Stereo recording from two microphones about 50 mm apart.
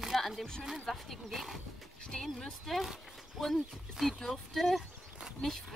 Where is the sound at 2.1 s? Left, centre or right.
Centre.